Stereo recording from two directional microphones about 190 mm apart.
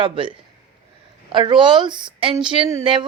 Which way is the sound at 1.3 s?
25° right (ahead or behind).